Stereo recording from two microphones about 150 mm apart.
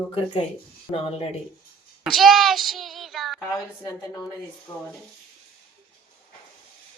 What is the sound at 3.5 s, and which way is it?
A woman's voice, 25° left (ahead or behind).